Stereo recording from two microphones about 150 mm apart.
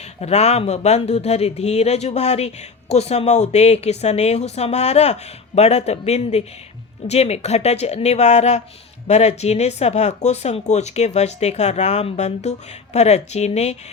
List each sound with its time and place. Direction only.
0.2 s speech: 45° left (ahead or behind)